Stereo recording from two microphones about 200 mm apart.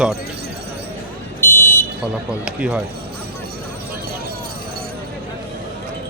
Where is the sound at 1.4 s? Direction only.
10° left (ahead or behind).